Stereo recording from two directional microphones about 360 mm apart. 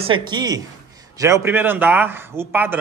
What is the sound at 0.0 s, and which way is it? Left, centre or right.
A man's voice, centre.